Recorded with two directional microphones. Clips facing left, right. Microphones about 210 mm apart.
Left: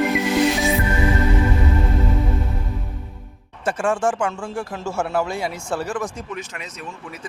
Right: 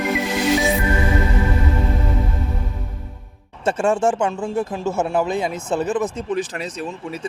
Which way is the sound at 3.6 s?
25° right (ahead or behind).